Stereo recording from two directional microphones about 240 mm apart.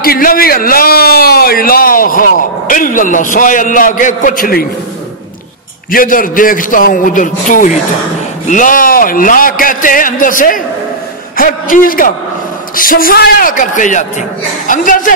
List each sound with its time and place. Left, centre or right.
0.0 s a man's voice: left
5.9 s a man's voice: left